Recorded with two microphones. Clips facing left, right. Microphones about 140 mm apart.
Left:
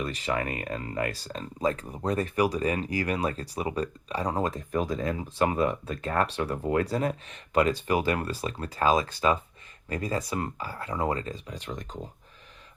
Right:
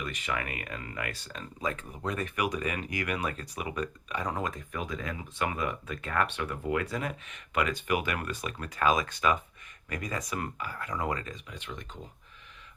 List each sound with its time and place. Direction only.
0.0 s speech: 35° left (ahead or behind)